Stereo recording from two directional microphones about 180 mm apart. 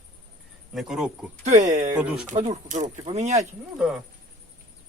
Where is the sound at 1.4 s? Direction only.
40° right (ahead or behind).